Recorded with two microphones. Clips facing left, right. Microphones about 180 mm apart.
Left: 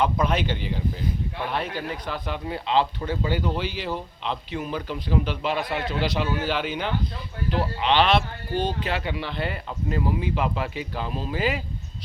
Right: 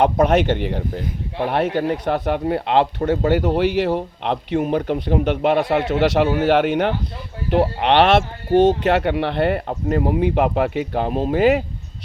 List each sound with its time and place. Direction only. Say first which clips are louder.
0.0 s speech: right 8 dB; 70° right (ahead or behind)